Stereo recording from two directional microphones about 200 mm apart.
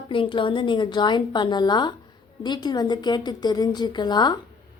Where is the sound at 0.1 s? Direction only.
25° left (ahead or behind).